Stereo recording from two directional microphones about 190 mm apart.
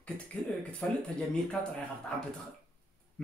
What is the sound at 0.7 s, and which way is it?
Speech, 5° left (ahead or behind).